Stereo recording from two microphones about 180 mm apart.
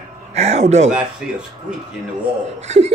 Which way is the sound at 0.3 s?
35° right (ahead or behind).